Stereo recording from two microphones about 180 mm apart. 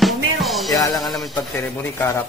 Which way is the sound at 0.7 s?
20° left (ahead or behind).